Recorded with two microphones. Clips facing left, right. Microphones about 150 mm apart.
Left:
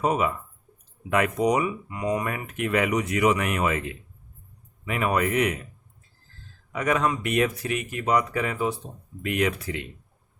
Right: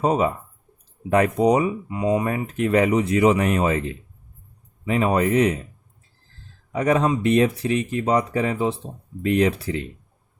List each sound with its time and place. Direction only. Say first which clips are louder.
0.0 s speech: right 4 dB; 30° right (ahead or behind)
6.7 s speech: right 5 dB; 35° right (ahead or behind)